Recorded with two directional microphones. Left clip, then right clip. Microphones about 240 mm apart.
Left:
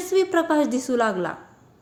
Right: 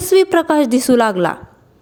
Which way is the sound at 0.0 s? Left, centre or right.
Right.